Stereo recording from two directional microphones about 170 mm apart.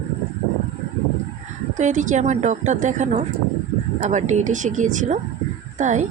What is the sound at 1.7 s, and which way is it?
Speech, 50° right (ahead or behind).